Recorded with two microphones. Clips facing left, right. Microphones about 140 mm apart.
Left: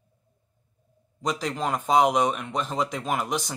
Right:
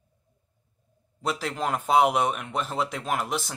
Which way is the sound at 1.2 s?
5° right (ahead or behind).